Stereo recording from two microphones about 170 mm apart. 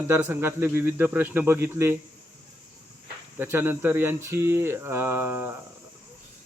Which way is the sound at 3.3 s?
15° right (ahead or behind).